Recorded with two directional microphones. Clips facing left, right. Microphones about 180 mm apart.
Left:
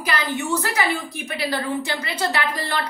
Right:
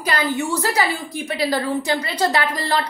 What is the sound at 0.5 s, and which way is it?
Speech, 35° right (ahead or behind).